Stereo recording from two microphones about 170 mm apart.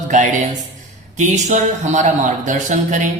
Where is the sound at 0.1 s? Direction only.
45° right (ahead or behind).